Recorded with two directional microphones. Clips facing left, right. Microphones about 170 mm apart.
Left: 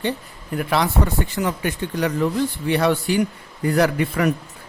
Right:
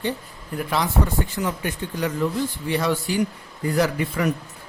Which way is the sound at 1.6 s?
70° left (ahead or behind).